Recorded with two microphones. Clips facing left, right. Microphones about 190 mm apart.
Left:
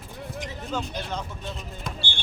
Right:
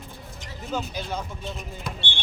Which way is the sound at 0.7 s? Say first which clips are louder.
Right 1 dB; 5° right (ahead or behind).